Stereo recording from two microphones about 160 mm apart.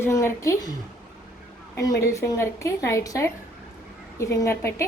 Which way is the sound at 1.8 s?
20° left (ahead or behind).